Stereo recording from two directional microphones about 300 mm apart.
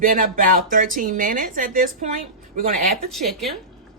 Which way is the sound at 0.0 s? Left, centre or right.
Right.